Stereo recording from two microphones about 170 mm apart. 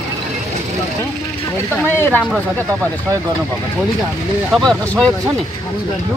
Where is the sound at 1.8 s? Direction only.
10° left (ahead or behind).